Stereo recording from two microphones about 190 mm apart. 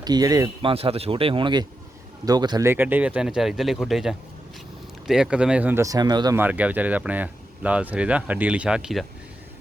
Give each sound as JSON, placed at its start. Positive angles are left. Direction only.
{"t": 0.0, "sound": "speech", "side_deg": -20}
{"t": 0.7, "sound": "speech", "side_deg": -30}
{"t": 6.4, "sound": "speech", "side_deg": -10}